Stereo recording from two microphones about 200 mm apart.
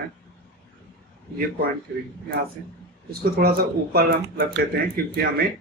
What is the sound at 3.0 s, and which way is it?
A man's voice, 50° right (ahead or behind).